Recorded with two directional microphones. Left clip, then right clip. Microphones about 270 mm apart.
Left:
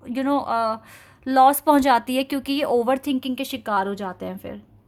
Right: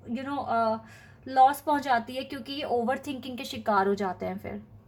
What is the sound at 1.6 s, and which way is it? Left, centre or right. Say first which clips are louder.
A woman's voice: left 8 dB; left.